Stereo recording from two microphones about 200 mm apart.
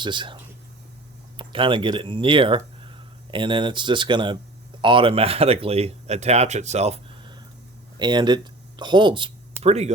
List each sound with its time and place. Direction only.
0.0 s speech: 25° right (ahead or behind)
1.4 s speech: 25° right (ahead or behind)